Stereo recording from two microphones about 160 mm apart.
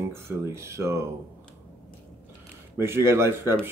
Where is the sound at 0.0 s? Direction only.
15° right (ahead or behind).